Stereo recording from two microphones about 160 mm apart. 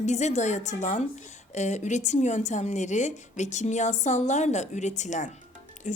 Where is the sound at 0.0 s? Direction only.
45° left (ahead or behind).